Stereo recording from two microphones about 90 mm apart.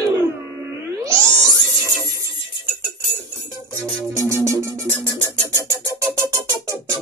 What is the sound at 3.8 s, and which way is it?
Music, 40° right (ahead or behind).